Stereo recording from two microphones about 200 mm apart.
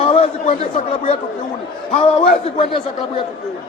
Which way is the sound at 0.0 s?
30° left (ahead or behind).